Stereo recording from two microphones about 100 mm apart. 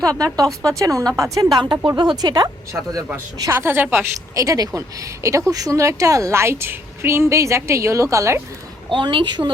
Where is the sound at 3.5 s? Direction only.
25° right (ahead or behind).